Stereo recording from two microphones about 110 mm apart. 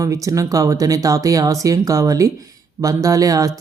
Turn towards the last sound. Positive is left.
turn(degrees=-35)  # may be behind; listen again after turning